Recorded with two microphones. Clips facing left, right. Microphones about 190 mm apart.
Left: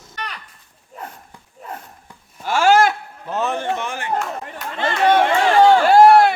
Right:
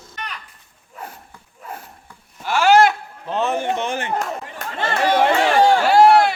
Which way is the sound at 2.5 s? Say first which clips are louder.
Left 1 dB; 45° left (ahead or behind).